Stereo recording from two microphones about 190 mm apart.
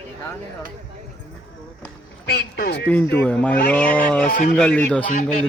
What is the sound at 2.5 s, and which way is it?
Speech, 55° left (ahead or behind).